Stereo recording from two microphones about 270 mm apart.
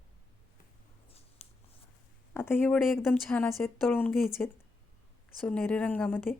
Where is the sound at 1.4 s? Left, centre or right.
Left.